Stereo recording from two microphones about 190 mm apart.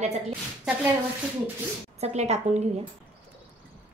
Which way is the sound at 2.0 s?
35° right (ahead or behind).